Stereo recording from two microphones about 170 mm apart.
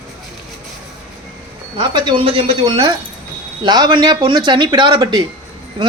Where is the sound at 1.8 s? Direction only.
25° right (ahead or behind).